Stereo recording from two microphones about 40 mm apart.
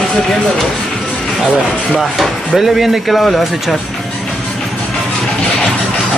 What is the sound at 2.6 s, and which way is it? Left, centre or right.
Speech, centre.